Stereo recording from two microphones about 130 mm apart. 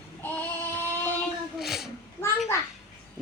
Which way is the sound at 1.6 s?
Centre (ahead or behind).